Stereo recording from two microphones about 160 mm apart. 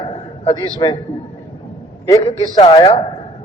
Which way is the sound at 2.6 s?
35° left (ahead or behind).